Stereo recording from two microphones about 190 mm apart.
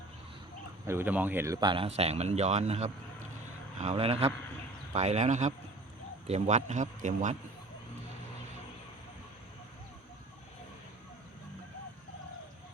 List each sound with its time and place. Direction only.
0.9 s speech: 10° right (ahead or behind)
1.5 s speech: 25° right (ahead or behind); by 7.3 s 40° right (ahead or behind)